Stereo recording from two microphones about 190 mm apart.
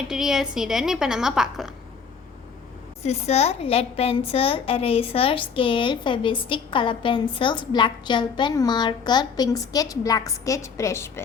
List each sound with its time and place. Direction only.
0.1 s a woman's voice: centre (ahead or behind)
3.0 s a woman's voice: 35° left (ahead or behind); by 11.2 s 15° left (ahead or behind)